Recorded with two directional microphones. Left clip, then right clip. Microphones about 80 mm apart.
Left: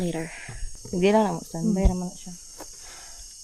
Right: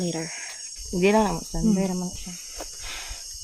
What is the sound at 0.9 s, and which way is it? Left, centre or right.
Cricket, left.